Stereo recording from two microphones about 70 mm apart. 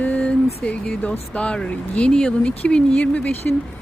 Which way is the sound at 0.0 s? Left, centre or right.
Centre.